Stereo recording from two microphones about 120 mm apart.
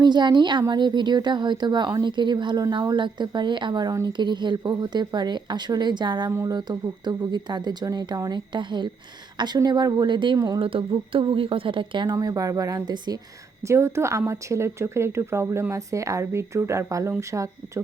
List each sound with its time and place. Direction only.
0.0 s speech: 40° right (ahead or behind)
10.6 s a woman's voice: 50° right (ahead or behind)
12.1 s speech: 30° right (ahead or behind)